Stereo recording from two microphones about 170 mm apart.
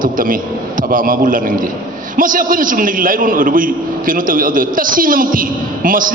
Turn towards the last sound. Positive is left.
turn(degrees=-55)  # may be behind; listen again after turning